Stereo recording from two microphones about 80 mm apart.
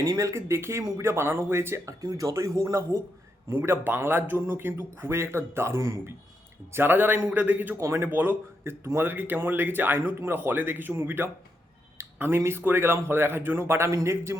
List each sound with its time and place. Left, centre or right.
0.0 s speech: right
6.7 s speech: right
7.8 s speech: right
11.9 s a sound: right
12.4 s speech: right